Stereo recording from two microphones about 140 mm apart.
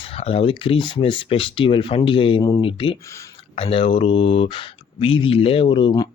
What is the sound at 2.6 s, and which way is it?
Speech, 40° left (ahead or behind).